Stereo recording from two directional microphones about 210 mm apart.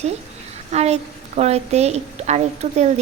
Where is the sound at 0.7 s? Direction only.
30° right (ahead or behind).